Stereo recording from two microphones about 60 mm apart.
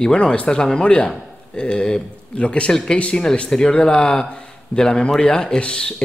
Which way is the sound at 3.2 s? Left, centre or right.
Centre.